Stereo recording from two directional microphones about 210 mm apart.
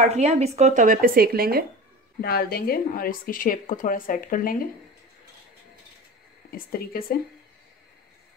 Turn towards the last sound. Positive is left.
turn(degrees=45)  # may be behind; listen again after turning